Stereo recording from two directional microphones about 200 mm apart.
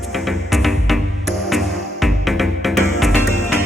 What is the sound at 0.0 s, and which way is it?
Music, centre (ahead or behind).